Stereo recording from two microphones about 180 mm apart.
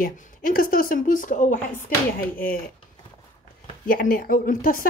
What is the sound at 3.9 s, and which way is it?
Speech, 55° left (ahead or behind).